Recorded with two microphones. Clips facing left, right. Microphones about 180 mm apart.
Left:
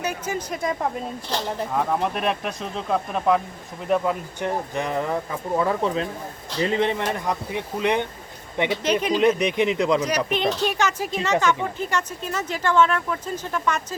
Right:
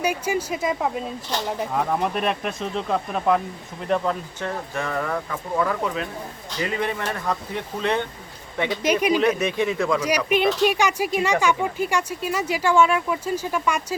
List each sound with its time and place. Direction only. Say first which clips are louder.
0.0 s speech: right 4 dB; 10° right (ahead or behind); by 8.8 s 20° left (ahead or behind)
8.8 s speech: right 4 dB; 10° right (ahead or behind)
9.4 s speech: left 1 dB; 15° left (ahead or behind)
10.0 s speech: right 2 dB; 10° right (ahead or behind)